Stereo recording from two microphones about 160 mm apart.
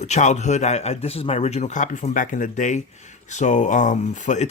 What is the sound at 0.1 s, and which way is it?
Speech, 45° left (ahead or behind).